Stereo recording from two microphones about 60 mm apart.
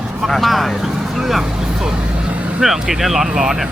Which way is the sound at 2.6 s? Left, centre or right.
Centre.